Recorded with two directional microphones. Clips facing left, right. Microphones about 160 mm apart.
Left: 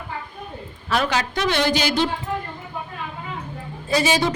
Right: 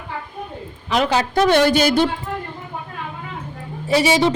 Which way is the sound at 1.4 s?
50° right (ahead or behind).